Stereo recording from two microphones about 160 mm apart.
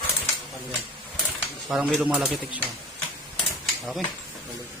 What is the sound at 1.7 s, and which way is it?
Speech, 5° right (ahead or behind).